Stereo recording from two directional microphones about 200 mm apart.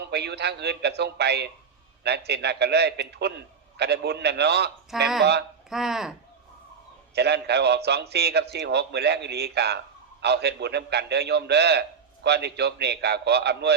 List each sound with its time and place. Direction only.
0.1 s a man's voice: 55° right (ahead or behind)
4.9 s speech: centre (ahead or behind)
7.2 s a man's voice: 55° right (ahead or behind)